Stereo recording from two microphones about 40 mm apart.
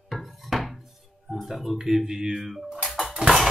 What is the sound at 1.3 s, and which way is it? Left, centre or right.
Speech, centre.